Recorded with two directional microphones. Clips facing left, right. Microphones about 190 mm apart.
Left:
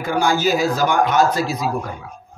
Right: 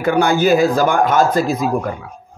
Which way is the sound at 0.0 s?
60° right (ahead or behind).